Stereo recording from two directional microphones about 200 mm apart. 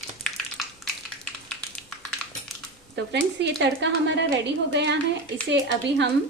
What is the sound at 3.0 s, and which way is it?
A woman's voice, 60° right (ahead or behind).